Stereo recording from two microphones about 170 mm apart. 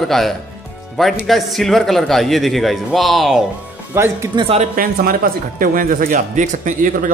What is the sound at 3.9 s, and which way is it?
Speech, 15° right (ahead or behind).